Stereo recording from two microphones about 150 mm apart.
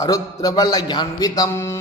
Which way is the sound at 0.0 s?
25° left (ahead or behind).